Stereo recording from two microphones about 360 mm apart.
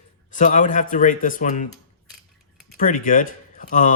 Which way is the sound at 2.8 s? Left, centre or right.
Left.